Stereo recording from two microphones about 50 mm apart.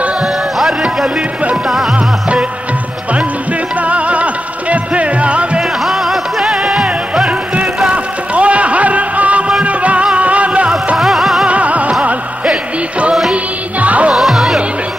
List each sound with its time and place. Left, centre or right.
0.2 s music: centre
2.0 s music: right
3.8 s music: right
5.6 s music: centre
7.2 s music: right
11.0 s music: centre
11.4 s music: right
13.3 s music: right
14.1 s music: centre